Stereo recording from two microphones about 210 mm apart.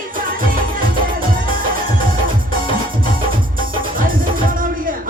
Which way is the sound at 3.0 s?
40° right (ahead or behind).